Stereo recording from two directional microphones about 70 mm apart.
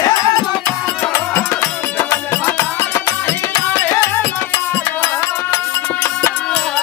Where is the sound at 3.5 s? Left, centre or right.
Left.